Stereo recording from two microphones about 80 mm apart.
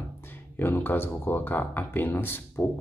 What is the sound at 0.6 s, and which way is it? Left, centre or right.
Speech, left.